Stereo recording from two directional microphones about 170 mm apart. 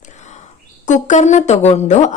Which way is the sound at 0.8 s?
45° left (ahead or behind).